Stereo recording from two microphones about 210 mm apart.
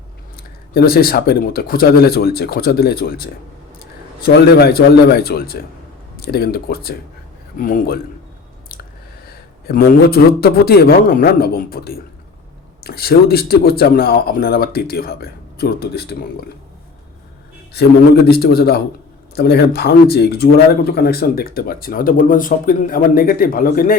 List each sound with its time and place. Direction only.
0.7 s speech: 45° left (ahead or behind)
9.6 s speech: 45° left (ahead or behind)
17.7 s speech: 50° left (ahead or behind)